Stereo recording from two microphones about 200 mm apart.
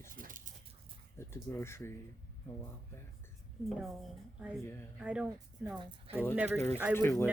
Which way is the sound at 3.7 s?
Centre (ahead or behind).